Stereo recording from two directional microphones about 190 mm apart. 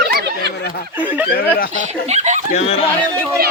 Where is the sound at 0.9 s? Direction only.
10° right (ahead or behind).